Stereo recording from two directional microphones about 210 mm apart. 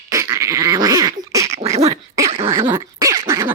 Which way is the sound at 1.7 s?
30° right (ahead or behind).